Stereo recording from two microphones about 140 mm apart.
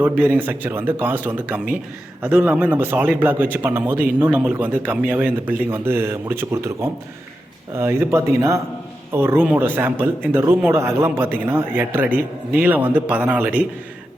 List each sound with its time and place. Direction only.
0.0 s a man's voice: 15° right (ahead or behind)
7.8 s a man's voice: 20° right (ahead or behind)